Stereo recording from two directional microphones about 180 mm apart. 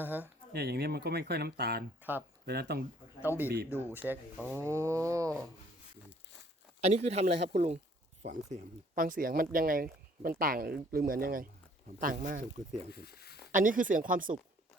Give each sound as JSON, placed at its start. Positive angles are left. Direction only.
{"t": 0.0, "sound": "speech", "side_deg": -10}
{"t": 0.5, "sound": "speech", "side_deg": -60}
{"t": 2.0, "sound": "speech", "side_deg": -10}
{"t": 2.5, "sound": "speech", "side_deg": -60}
{"t": 3.2, "sound": "speech", "side_deg": -10}
{"t": 6.8, "sound": "speech", "side_deg": -40}
{"t": 12.9, "sound": "speech", "side_deg": 60}
{"t": 13.5, "sound": "speech", "side_deg": -50}